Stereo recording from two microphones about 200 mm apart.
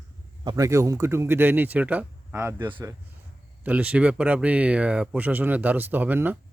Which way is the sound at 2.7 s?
25° right (ahead or behind).